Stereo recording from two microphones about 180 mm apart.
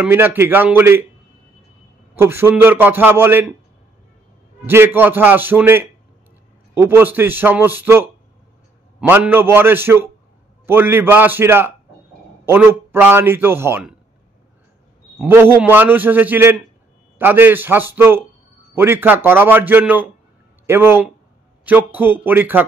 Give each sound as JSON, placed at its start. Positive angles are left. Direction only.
{"t": 0.0, "sound": "a man's voice", "side_deg": -10}
{"t": 2.1, "sound": "a man's voice", "side_deg": -15}
{"t": 4.6, "sound": "a man's voice", "side_deg": -10}
{"t": 15.1, "sound": "a man's voice", "side_deg": -10}